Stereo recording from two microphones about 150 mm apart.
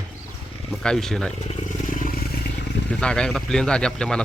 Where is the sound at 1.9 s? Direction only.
65° left (ahead or behind).